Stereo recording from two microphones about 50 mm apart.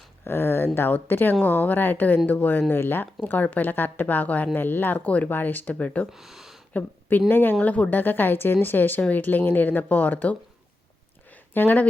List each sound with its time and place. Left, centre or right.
0.3 s speech: left
3.2 s speech: left
4.9 s speech: left
5.3 s speech: left
6.1 s speech: centre
7.3 s speech: left
7.6 s speech: left
11.3 s a sound: left